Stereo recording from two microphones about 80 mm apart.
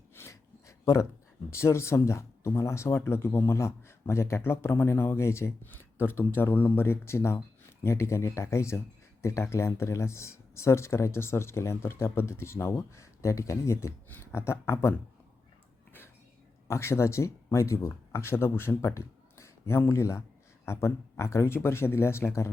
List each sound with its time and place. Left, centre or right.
0.1 s a sound: left
1.5 s speech: left
16.6 s speech: left